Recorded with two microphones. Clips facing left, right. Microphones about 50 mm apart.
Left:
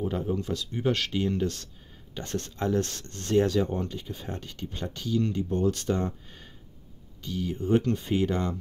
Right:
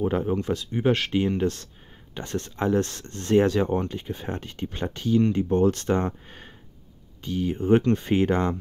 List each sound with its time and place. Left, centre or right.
0.0 s speech: right
0.7 s speech: right